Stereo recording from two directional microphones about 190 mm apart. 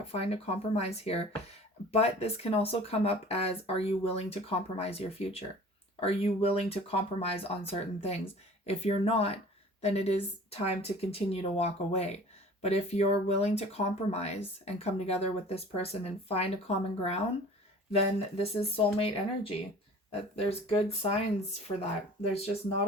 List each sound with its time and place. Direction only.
0.1 s speech: 35° left (ahead or behind)
18.3 s speech: 30° left (ahead or behind)
22.3 s speech: 30° left (ahead or behind)